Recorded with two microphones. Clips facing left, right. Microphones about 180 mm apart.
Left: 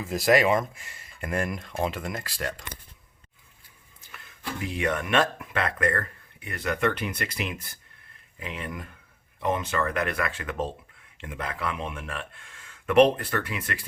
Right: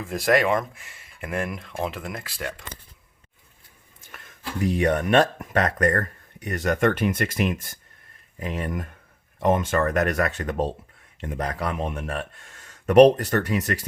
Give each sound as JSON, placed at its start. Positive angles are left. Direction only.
{"t": 0.0, "sound": "speech", "side_deg": 0}
{"t": 4.1, "sound": "speech", "side_deg": -50}